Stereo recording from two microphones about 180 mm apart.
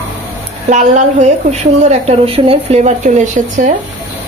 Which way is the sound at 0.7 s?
40° right (ahead or behind).